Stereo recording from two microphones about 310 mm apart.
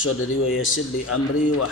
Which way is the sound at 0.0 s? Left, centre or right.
Left.